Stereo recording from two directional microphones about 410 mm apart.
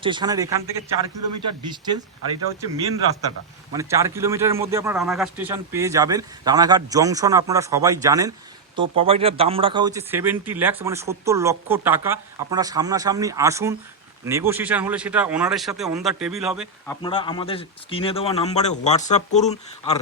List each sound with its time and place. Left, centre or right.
0.0 s speech: centre
1.2 s a man's voice: right
1.6 s speech: centre